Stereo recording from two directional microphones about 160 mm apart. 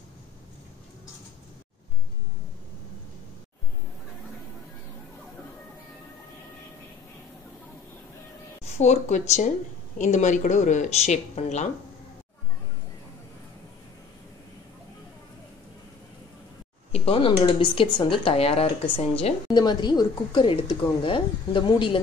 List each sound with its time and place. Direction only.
8.7 s speech: 45° left (ahead or behind)
16.9 s a sound: 35° left (ahead or behind)
17.4 s speech: 30° left (ahead or behind)
19.5 s speech: 25° left (ahead or behind)